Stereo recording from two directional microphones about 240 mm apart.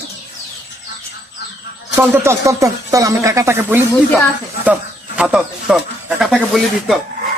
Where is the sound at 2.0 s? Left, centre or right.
Centre.